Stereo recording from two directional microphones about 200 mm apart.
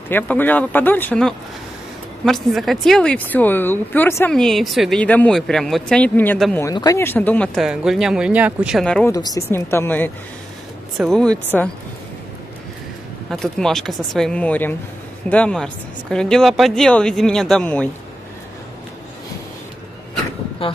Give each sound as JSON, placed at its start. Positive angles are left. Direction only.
{"t": 0.1, "sound": "speech", "side_deg": 10}
{"t": 6.6, "sound": "speech", "side_deg": 20}
{"t": 9.1, "sound": "speech", "side_deg": 15}
{"t": 13.3, "sound": "speech", "side_deg": 0}
{"t": 20.6, "sound": "speech", "side_deg": 25}